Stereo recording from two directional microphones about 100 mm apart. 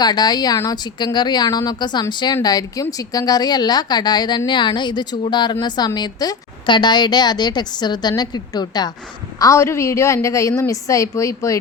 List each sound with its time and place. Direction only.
0.0 s a woman's voice: 45° left (ahead or behind)
9.4 s a woman's voice: 30° left (ahead or behind)